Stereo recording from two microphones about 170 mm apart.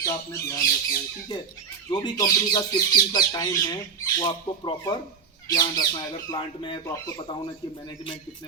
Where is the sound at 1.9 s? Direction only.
25° left (ahead or behind).